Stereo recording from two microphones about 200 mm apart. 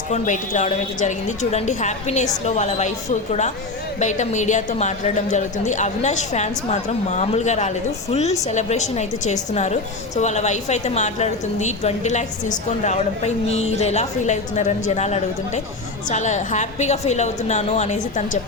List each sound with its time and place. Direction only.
0.1 s a woman's voice: 35° left (ahead or behind)